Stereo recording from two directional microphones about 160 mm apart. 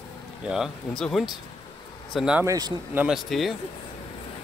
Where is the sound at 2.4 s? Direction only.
20° right (ahead or behind).